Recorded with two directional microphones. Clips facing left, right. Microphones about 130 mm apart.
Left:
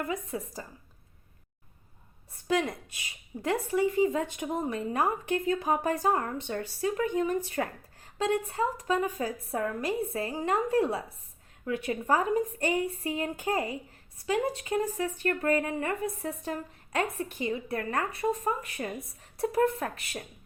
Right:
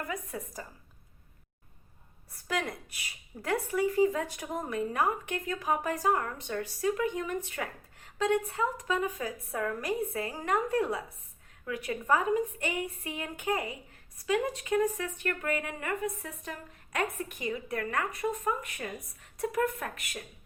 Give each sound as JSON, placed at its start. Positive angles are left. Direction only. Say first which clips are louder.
{"t": 0.1, "sound": "a woman's voice", "louder": "left 4 dB", "side_deg": 25}
{"t": 2.5, "sound": "a woman's voice", "louder": "left 5 dB", "side_deg": 25}